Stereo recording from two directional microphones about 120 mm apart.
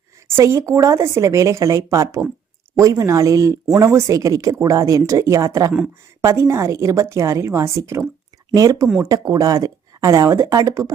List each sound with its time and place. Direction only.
0.3 s speech: 25° right (ahead or behind)